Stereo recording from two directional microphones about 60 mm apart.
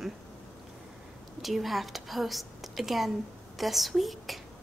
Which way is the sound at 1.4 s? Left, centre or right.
Centre.